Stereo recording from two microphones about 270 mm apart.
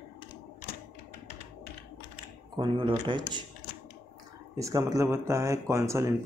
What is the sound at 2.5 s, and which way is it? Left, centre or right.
Speech, centre.